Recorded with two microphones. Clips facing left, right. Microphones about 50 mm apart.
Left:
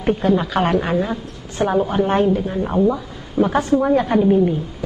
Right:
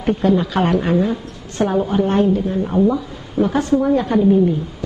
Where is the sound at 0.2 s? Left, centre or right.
Centre.